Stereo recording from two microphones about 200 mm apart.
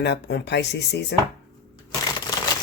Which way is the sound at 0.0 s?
60° left (ahead or behind).